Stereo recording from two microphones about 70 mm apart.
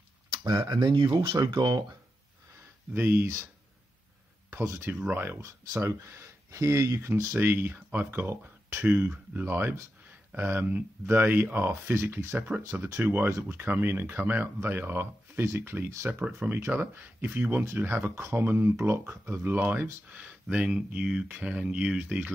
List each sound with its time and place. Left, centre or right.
0.5 s speech: right
2.9 s speech: right
4.5 s speech: right
5.4 s speech: right
7.3 s speech: right
15.4 s speech: right
15.7 s speech: right; by 21.9 s centre